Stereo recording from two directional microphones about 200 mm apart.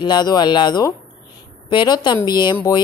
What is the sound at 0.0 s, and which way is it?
Speech, 20° left (ahead or behind).